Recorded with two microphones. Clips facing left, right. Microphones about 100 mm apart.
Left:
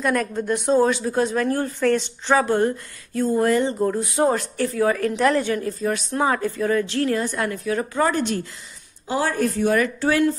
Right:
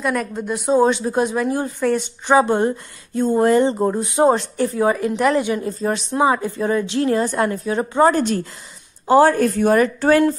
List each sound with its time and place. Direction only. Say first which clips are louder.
0.0 s a woman's voice: even; 5° right (ahead or behind)
0.7 s a woman's voice: right 4 dB; 25° right (ahead or behind)
6.1 s speech: right 5 dB; 15° right (ahead or behind)
8.1 s a woman's voice: right 4 dB; 40° right (ahead or behind)